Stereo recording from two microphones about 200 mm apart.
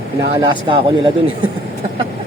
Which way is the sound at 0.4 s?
25° right (ahead or behind).